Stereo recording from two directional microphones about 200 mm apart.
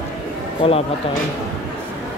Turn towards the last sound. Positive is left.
turn(degrees=30)  # may be behind; listen again after turning